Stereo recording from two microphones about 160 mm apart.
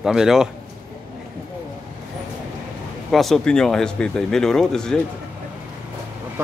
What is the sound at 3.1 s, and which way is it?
A man's voice, centre (ahead or behind).